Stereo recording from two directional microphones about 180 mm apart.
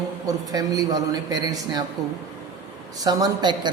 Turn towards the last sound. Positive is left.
turn(degrees=-25)  # may be behind; listen again after turning